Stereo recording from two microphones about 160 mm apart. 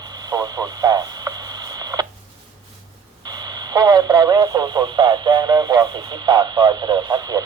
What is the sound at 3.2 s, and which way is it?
Speech, 25° right (ahead or behind).